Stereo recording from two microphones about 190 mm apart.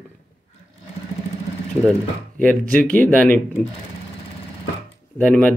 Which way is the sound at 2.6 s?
45° right (ahead or behind).